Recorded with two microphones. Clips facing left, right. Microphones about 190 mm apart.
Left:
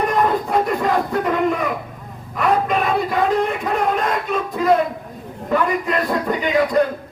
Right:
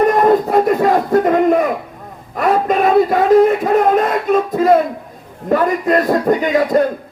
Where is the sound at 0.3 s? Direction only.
45° right (ahead or behind).